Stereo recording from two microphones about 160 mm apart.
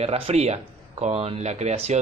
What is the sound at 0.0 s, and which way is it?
Speech, 40° right (ahead or behind).